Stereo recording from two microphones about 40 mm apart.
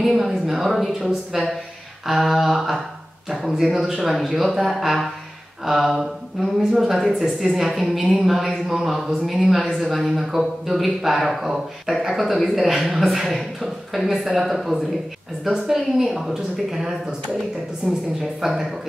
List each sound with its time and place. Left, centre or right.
0.0 s a woman's voice: centre
18.2 s a woman's voice: centre